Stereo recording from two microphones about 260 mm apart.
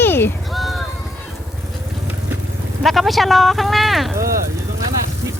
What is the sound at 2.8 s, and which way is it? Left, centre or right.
Speech, centre.